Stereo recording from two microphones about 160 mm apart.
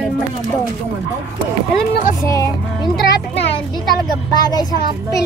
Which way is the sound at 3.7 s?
25° left (ahead or behind).